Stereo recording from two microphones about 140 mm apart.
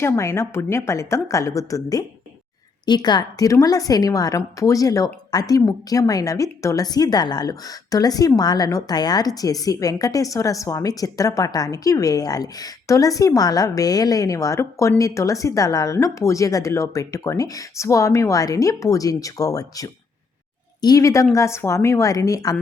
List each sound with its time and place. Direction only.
0.0 s a woman's voice: 20° left (ahead or behind)